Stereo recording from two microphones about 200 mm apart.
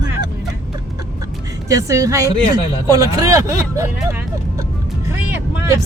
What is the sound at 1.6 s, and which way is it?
Speech, 15° right (ahead or behind).